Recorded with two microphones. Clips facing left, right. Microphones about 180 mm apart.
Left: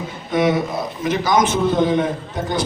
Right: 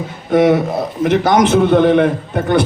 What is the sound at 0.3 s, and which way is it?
A man's voice, 65° right (ahead or behind).